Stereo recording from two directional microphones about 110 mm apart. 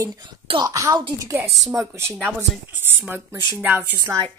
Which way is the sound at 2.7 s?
20° right (ahead or behind).